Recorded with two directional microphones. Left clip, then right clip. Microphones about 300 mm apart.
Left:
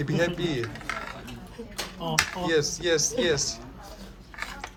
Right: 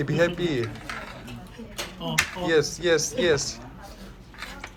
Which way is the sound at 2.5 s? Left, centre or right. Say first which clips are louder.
Right 5 dB; centre.